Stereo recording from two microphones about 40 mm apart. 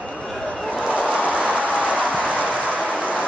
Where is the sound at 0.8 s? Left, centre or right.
Right.